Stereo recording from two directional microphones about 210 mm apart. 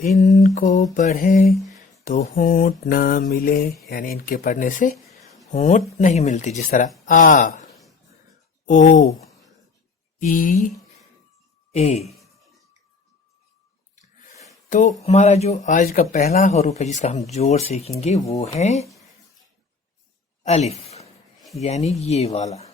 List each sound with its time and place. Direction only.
0.2 s mantra: 35° left (ahead or behind)
0.9 s speech: 40° left (ahead or behind)
2.0 s mantra: 40° left (ahead or behind)
3.8 s speech: 45° left (ahead or behind)
10.2 s speech: 40° left (ahead or behind)
11.7 s speech: 30° left (ahead or behind)
12.0 s a sound: centre (ahead or behind)
14.7 s speech: 35° left (ahead or behind)
20.5 s speech: 30° left (ahead or behind)